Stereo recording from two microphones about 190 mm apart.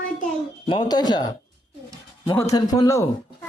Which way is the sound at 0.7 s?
20° left (ahead or behind).